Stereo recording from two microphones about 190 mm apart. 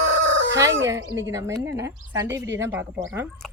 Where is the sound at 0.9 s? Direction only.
15° right (ahead or behind).